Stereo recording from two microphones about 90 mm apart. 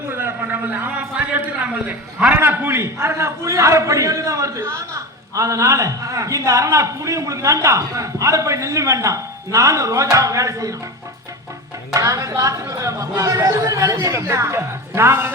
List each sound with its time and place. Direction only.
0.1 s a man's voice: 25° right (ahead or behind)
11.9 s speech: 35° right (ahead or behind)